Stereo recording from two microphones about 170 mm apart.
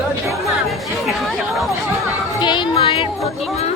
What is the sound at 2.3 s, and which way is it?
Speech, 25° left (ahead or behind).